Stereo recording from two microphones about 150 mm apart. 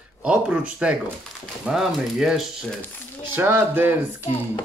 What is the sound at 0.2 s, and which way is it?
Speech, 5° right (ahead or behind).